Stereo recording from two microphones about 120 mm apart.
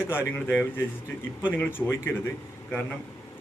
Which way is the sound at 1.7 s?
20° left (ahead or behind).